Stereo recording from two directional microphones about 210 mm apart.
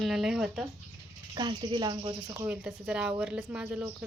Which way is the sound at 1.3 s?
20° right (ahead or behind).